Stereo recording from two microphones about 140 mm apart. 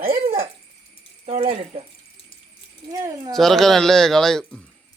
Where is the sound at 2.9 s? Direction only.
25° right (ahead or behind).